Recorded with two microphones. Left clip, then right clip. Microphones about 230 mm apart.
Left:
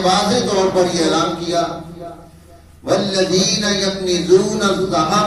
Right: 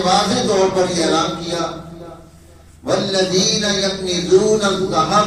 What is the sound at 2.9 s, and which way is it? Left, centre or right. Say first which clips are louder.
A man's voice: left 1 dB; left.